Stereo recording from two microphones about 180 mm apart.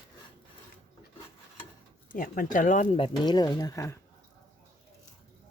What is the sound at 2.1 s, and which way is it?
Speech, 50° left (ahead or behind).